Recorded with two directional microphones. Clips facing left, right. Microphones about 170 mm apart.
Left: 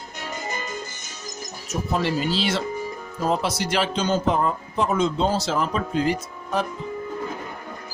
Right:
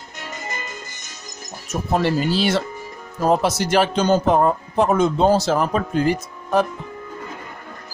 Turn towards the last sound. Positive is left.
turn(degrees=-50)  # may be behind; listen again after turning